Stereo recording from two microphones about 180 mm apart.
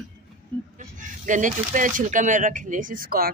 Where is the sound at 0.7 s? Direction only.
45° right (ahead or behind).